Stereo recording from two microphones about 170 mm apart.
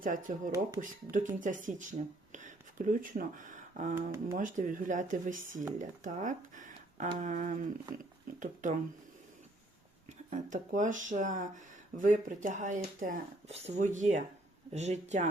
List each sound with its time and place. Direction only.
0.0 s speech: 50° right (ahead or behind)
3.9 s speech: 15° right (ahead or behind)
4.4 s speech: 50° right (ahead or behind)
10.1 s speech: 45° right (ahead or behind)